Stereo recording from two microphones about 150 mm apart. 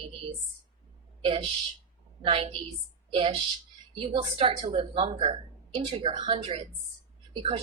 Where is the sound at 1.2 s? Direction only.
40° right (ahead or behind).